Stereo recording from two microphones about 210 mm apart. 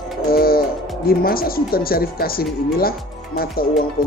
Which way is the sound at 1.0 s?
45° left (ahead or behind).